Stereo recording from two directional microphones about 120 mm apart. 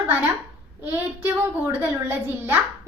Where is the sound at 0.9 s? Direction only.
15° right (ahead or behind).